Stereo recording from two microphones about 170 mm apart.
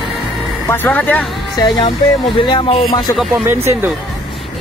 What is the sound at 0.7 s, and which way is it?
Speech, 10° left (ahead or behind).